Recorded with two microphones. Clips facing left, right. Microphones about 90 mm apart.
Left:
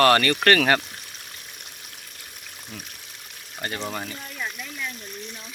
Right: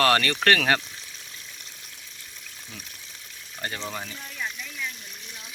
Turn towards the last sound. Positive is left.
turn(degrees=10)  # may be behind; listen again after turning